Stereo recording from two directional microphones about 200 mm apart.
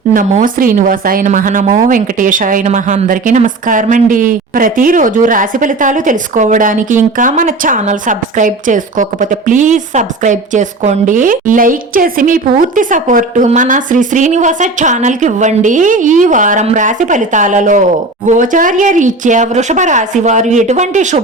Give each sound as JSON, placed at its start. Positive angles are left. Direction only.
{"t": 0.1, "sound": "a woman's voice", "side_deg": -40}